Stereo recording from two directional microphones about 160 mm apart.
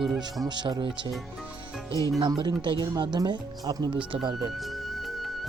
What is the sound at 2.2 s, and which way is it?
Speech, 25° right (ahead or behind).